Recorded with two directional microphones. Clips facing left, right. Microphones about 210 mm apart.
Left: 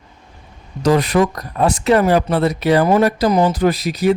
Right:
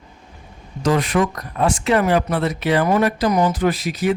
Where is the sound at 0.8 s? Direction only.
40° left (ahead or behind).